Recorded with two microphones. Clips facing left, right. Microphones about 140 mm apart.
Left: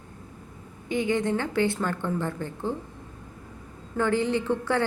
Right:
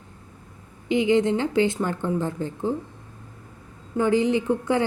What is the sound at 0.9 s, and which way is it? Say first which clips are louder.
A woman's voice: right 5 dB; 20° right (ahead or behind).